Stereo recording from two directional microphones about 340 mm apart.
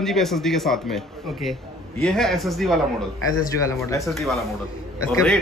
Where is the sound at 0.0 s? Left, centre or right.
Centre.